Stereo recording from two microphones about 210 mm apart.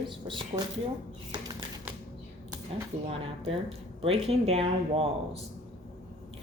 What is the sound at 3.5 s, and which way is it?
A woman's voice, 25° right (ahead or behind).